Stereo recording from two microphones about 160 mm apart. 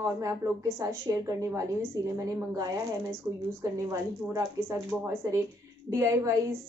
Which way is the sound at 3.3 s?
10° right (ahead or behind).